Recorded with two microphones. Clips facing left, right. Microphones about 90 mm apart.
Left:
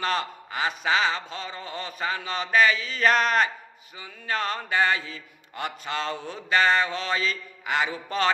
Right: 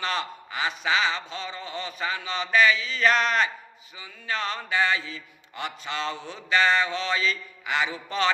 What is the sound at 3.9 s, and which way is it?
Mantra, 50° left (ahead or behind).